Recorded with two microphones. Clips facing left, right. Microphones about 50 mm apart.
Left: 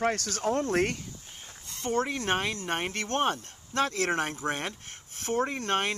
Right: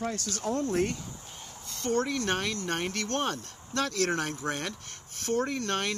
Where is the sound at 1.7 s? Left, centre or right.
Left.